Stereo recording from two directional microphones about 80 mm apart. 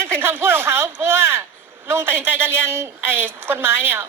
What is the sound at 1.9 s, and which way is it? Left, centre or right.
A woman's voice, right.